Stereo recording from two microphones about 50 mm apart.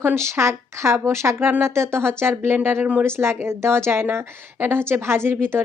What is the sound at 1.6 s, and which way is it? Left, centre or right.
A woman's voice, right.